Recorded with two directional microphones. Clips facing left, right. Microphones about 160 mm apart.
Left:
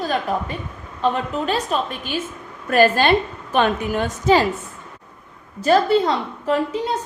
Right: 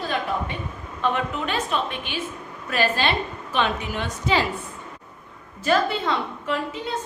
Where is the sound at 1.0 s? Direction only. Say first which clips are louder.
Left 4 dB; 35° left (ahead or behind).